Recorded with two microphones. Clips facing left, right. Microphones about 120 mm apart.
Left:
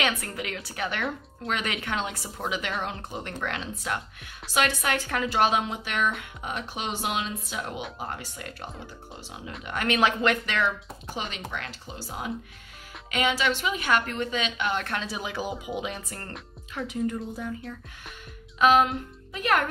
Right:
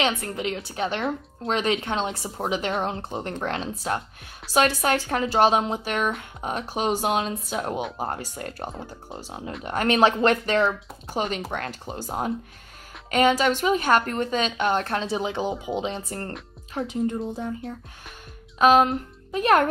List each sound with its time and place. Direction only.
0.0 s a woman's voice: 25° right (ahead or behind)